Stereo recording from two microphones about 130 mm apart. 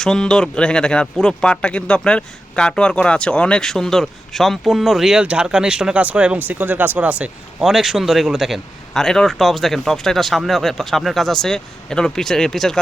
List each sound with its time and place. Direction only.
0.0 s speech: 5° left (ahead or behind)